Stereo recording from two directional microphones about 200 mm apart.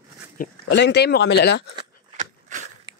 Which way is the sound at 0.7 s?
60° left (ahead or behind).